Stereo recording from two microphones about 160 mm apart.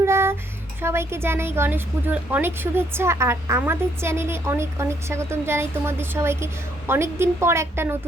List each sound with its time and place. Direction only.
0.0 s music: 15° right (ahead or behind)
0.8 s speech: 15° right (ahead or behind)